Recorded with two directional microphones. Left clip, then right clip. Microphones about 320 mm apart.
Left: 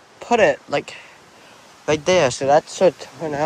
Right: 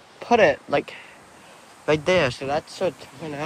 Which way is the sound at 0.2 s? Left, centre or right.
Centre.